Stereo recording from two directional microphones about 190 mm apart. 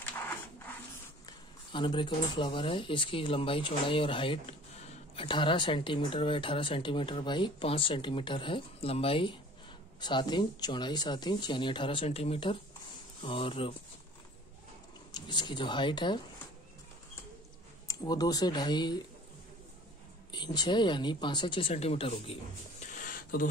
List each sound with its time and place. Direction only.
1.2 s speech: 25° left (ahead or behind)
15.1 s speech: 25° left (ahead or behind)
17.8 s speech: 20° left (ahead or behind)
20.2 s speech: 20° left (ahead or behind); by 23.5 s 45° left (ahead or behind)